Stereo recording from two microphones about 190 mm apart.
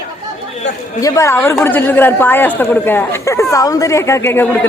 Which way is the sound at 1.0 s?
15° left (ahead or behind).